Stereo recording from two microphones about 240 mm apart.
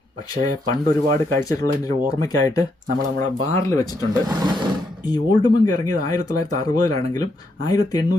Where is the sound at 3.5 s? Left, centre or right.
Centre.